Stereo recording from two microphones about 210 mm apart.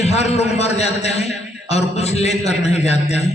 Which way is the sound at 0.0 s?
30° left (ahead or behind).